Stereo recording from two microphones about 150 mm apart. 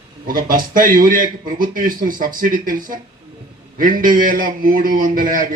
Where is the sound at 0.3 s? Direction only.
70° right (ahead or behind).